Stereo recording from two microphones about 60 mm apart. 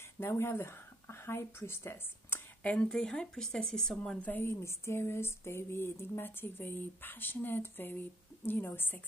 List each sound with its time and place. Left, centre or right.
0.2 s speech: left
2.6 s speech: left
3.0 s speech: centre
4.2 s speech: left
4.5 s a sound: left